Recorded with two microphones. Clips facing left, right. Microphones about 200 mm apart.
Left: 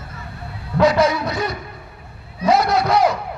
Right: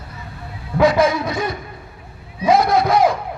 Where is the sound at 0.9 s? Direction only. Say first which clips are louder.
Right 1 dB; 50° right (ahead or behind).